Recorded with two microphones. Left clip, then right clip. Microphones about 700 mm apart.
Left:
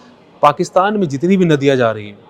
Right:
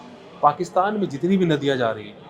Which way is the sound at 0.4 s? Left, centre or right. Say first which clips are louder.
Left 7 dB; left.